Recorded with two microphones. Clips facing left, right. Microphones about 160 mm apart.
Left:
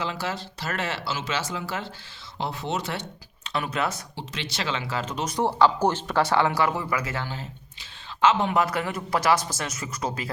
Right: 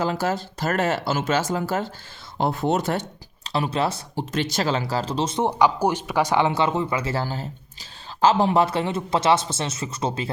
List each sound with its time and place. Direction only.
0.0 s speech: 45° right (ahead or behind)
3.5 s speech: 30° right (ahead or behind)
4.1 s speech: 45° right (ahead or behind); by 10.3 s 25° right (ahead or behind)